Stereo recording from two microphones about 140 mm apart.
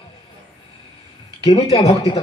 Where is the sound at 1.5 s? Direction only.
45° left (ahead or behind).